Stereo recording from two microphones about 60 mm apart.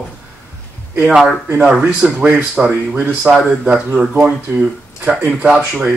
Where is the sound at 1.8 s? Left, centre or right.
Centre.